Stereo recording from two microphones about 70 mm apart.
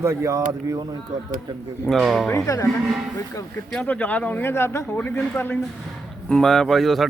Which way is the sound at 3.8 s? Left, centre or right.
Left.